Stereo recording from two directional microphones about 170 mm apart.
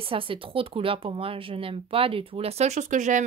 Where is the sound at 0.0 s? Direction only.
30° right (ahead or behind).